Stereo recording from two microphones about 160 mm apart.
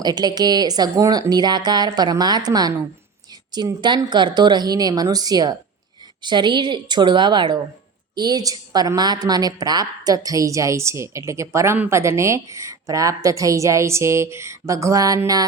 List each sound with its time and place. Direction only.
0.0 s a woman's voice: 25° right (ahead or behind)